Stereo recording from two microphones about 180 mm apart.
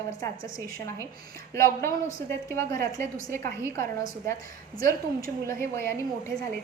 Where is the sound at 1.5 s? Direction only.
15° left (ahead or behind).